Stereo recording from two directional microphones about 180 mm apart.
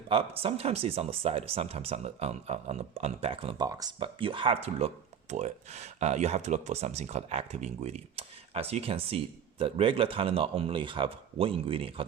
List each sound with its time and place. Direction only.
0.1 s speech: 30° right (ahead or behind)